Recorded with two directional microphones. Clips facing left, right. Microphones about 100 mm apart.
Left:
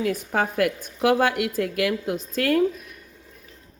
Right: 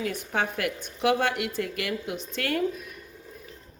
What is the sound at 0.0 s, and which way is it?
A woman's voice, 40° left (ahead or behind).